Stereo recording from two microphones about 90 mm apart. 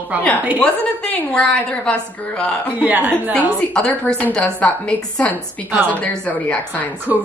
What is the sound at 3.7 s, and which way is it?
A woman's voice, 10° left (ahead or behind).